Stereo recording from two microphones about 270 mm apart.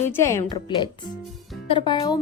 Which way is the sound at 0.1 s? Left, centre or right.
Centre.